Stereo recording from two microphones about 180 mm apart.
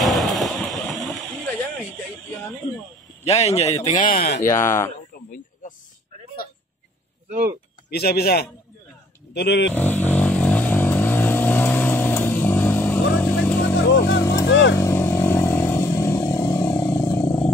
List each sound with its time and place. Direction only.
0.0 s a sound: centre (ahead or behind)
3.3 s a man's voice: 40° left (ahead or behind)
4.1 s speech: 55° left (ahead or behind)
4.5 s speech: 15° left (ahead or behind)
7.2 s speech: 50° right (ahead or behind)
7.9 s speech: 65° left (ahead or behind)
9.8 s vehicle: 10° left (ahead or behind)
13.8 s vehicle: 65° left (ahead or behind)
14.5 s vehicle: 90° left
14.8 s vehicle: 15° left (ahead or behind)